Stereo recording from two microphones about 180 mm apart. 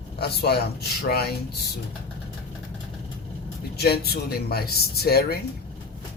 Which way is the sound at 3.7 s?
60° left (ahead or behind).